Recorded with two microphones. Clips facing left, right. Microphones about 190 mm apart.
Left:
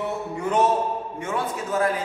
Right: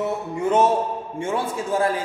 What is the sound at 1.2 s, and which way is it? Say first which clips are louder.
Speech: right 4 dB; 30° right (ahead or behind).